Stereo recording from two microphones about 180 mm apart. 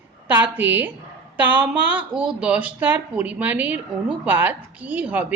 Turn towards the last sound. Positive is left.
turn(degrees=-5)  # may be behind; listen again after turning